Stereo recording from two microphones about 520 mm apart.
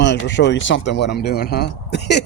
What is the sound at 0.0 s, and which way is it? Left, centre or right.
Speech, centre.